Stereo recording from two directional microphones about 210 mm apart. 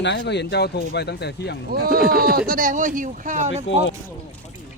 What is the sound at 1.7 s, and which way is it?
Speech, 45° right (ahead or behind).